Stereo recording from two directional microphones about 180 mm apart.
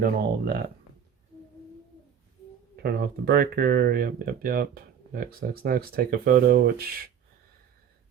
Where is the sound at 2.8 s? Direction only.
60° right (ahead or behind).